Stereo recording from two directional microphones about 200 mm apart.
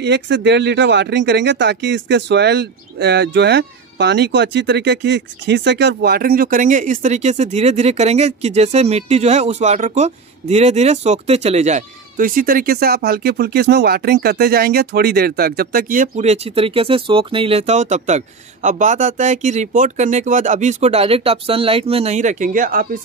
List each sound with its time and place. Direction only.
0.0 s speech: 60° right (ahead or behind); by 22.8 s 45° right (ahead or behind)